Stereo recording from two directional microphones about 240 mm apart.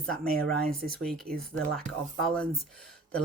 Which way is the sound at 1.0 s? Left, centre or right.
Centre.